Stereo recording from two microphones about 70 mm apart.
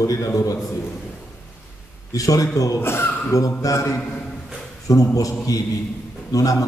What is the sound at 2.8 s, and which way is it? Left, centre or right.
Speech, left.